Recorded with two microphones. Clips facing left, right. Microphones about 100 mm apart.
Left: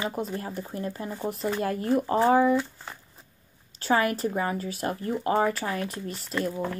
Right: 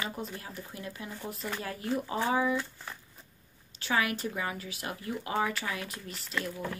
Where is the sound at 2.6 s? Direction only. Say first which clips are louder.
Left 6 dB; 20° left (ahead or behind).